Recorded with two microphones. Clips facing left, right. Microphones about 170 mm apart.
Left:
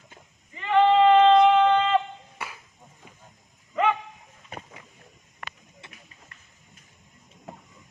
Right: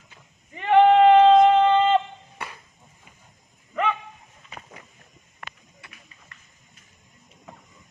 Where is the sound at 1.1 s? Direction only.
45° right (ahead or behind).